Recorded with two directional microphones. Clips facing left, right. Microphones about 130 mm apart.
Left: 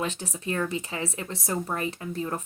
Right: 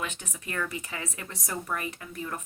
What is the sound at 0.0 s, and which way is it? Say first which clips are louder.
Speech: left 6 dB; 30° left (ahead or behind).